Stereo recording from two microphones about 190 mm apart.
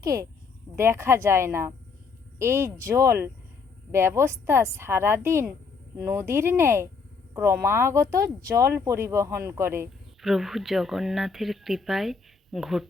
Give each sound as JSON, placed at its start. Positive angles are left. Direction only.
{"t": 0.0, "sound": "speech", "side_deg": -15}
{"t": 10.2, "sound": "speech", "side_deg": 0}